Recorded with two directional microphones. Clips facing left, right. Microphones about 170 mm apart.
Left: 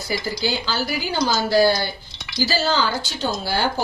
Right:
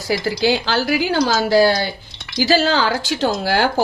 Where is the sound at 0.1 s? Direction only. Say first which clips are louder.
Right 7 dB; 85° right.